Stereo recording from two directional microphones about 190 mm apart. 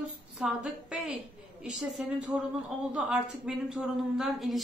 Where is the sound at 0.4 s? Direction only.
5° right (ahead or behind).